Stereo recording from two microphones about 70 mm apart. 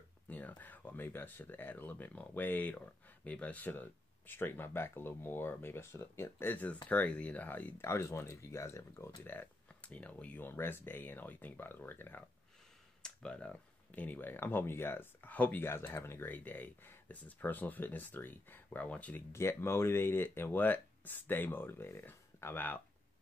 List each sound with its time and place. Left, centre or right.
0.3 s speech: left
6.5 s speech: left
7.8 s speech: left
9.2 s speech: left
9.8 s speech: centre
10.4 s speech: left
13.0 s speech: centre
19.3 s speech: left